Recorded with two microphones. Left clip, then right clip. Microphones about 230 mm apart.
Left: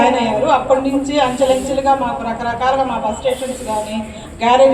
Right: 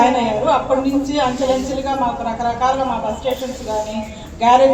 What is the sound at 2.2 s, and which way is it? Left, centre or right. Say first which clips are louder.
Speech: even; left.